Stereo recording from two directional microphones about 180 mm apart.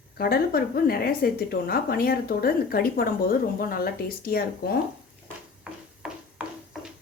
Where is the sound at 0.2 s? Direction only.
60° left (ahead or behind).